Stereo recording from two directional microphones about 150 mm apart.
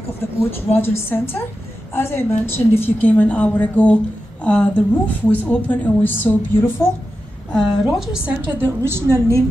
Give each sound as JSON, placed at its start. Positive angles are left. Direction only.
{"t": 0.4, "sound": "a woman's voice", "side_deg": 15}
{"t": 7.5, "sound": "a woman's voice", "side_deg": 0}
{"t": 8.5, "sound": "a woman's voice", "side_deg": -15}